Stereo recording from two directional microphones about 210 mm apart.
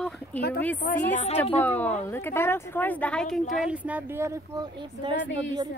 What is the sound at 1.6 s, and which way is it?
A woman's voice, 10° left (ahead or behind).